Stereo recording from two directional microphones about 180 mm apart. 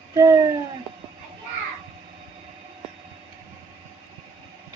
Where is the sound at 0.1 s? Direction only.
15° right (ahead or behind).